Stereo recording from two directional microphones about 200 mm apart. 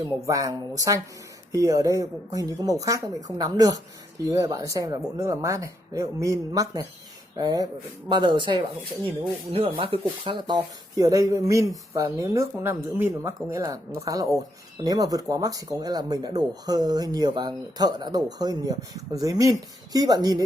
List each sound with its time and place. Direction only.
0.0 s speech: 15° right (ahead or behind)